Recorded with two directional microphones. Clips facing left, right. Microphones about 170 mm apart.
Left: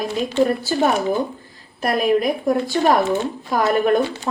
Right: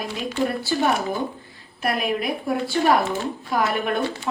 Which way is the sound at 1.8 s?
40° left (ahead or behind).